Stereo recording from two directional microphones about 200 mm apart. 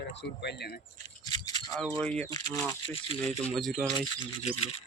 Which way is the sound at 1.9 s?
5° left (ahead or behind).